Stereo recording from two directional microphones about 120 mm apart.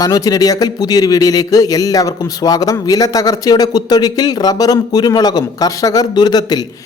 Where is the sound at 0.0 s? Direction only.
30° left (ahead or behind).